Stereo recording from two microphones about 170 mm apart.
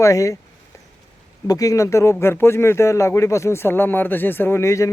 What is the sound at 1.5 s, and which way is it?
Speech, 20° left (ahead or behind).